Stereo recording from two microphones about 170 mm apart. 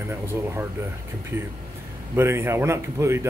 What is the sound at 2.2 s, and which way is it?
Speech, 15° right (ahead or behind).